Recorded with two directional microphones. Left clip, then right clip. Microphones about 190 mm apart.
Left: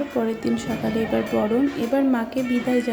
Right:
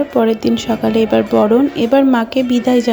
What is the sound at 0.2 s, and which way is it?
A woman's voice, 35° right (ahead or behind).